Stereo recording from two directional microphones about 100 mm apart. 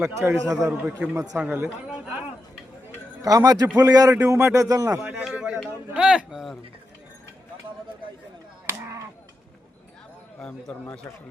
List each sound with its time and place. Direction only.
0.2 s speech: 30° right (ahead or behind)
0.7 s a man's voice: 15° right (ahead or behind)
3.2 s speech: 35° right (ahead or behind)
5.2 s a sound: 10° right (ahead or behind)
10.4 s speech: 10° left (ahead or behind)